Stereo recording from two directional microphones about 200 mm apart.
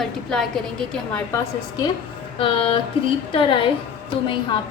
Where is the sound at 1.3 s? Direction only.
20° left (ahead or behind).